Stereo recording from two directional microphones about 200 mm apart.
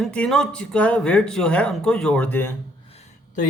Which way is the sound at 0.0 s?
5° left (ahead or behind).